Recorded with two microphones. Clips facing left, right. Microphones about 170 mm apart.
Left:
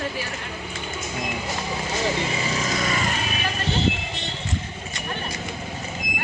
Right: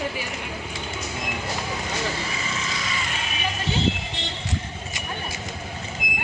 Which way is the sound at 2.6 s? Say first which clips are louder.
Left 6 dB; 50° left (ahead or behind).